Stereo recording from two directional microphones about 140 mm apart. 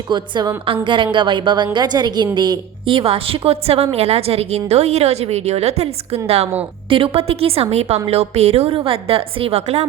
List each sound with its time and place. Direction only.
0.1 s a woman's voice: 30° right (ahead or behind); by 9.8 s 50° right (ahead or behind)